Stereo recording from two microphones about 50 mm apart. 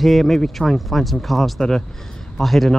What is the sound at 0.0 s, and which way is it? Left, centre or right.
Speech, centre.